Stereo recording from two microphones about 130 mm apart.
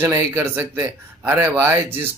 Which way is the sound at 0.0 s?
15° right (ahead or behind).